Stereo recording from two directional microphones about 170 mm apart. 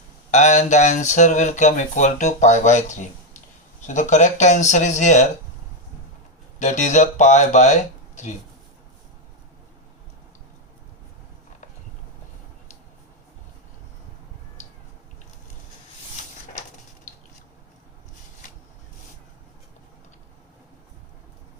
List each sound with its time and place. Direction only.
0.3 s speech: 45° left (ahead or behind)
6.6 s speech: 45° left (ahead or behind)